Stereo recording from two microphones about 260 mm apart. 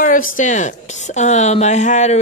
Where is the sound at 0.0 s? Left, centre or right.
Left.